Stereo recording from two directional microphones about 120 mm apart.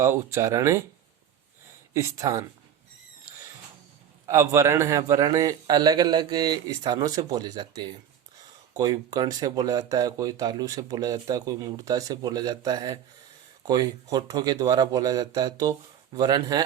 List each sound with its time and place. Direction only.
0.0 s speech: 20° right (ahead or behind)
1.9 s speech: 25° right (ahead or behind)
4.3 s speech: 25° right (ahead or behind)